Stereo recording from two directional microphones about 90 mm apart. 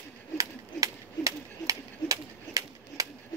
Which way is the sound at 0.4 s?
40° right (ahead or behind).